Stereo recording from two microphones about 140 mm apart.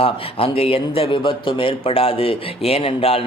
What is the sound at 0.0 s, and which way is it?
A man's voice, 40° left (ahead or behind).